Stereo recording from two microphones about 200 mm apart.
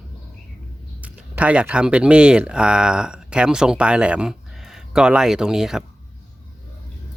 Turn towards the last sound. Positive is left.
turn(degrees=0)  # may be behind; listen again after turning